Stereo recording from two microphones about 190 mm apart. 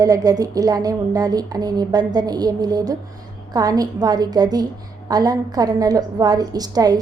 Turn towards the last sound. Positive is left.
turn(degrees=-20)  # may be behind; listen again after turning